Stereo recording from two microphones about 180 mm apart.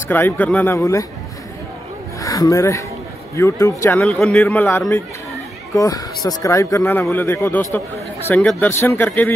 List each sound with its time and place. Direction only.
0.1 s speech: 10° left (ahead or behind)
2.1 s speech: 20° left (ahead or behind)
4.0 s speech: 5° left (ahead or behind)